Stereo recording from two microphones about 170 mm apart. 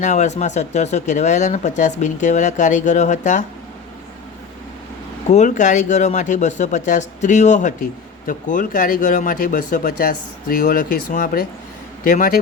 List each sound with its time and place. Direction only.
0.0 s speech: 45° left (ahead or behind)
5.3 s speech: 45° left (ahead or behind)